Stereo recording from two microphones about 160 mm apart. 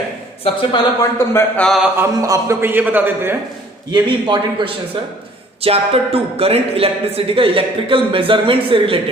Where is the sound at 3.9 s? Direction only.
25° right (ahead or behind).